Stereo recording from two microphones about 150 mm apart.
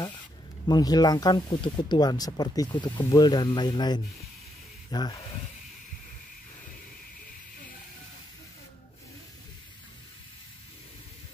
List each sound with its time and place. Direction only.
0.7 s speech: 25° left (ahead or behind)